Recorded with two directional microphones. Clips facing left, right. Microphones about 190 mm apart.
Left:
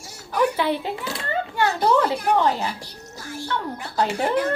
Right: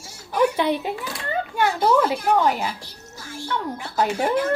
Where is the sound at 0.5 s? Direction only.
20° right (ahead or behind).